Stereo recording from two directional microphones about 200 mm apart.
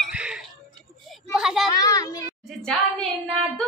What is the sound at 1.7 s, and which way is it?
Speech, 15° left (ahead or behind).